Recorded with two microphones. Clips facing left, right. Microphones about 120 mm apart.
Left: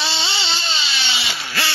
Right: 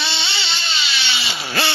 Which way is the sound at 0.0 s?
35° left (ahead or behind).